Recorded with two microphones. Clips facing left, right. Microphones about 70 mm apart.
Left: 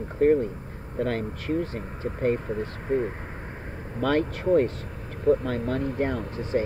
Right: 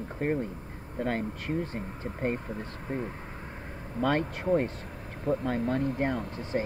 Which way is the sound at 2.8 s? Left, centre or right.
Left.